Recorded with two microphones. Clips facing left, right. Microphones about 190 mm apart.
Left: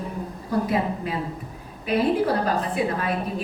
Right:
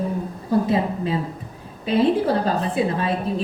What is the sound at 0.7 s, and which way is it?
A woman's voice, 25° right (ahead or behind).